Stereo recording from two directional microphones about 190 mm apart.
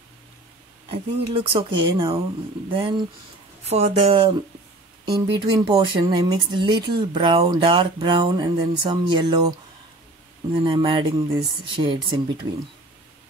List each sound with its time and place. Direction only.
0.8 s speech: 30° right (ahead or behind)
10.6 s speech: 25° right (ahead or behind)